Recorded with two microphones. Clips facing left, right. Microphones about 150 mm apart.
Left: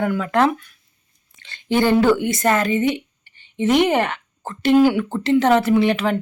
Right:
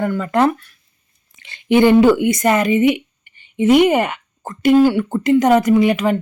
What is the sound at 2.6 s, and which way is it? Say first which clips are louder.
A woman's voice: right 5 dB; 15° right (ahead or behind).